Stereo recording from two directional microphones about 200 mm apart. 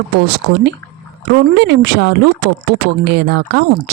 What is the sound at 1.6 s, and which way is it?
Speech, 55° right (ahead or behind).